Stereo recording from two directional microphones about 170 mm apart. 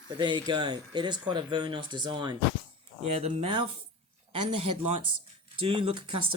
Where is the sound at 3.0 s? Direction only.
40° right (ahead or behind).